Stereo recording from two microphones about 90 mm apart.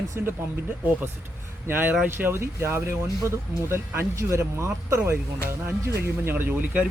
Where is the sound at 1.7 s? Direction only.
20° right (ahead or behind).